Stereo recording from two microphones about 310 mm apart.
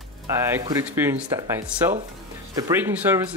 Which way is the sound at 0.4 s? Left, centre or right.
Centre.